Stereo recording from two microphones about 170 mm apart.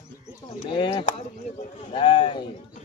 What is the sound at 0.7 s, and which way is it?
Speech, 30° left (ahead or behind).